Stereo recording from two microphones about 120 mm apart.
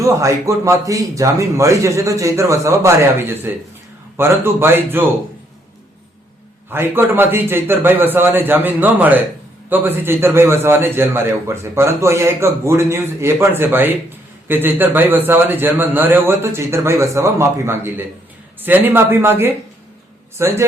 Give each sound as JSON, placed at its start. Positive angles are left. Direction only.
{"t": 0.0, "sound": "a man's voice", "side_deg": -25}
{"t": 6.7, "sound": "a man's voice", "side_deg": -20}